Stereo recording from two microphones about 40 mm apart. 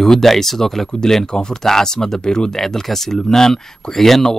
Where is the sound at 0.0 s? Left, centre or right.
Centre.